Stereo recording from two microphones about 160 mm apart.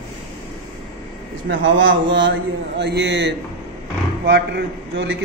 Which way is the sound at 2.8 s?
90° right.